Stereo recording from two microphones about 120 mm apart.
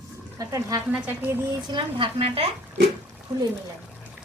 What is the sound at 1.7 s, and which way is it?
Speech, 45° right (ahead or behind).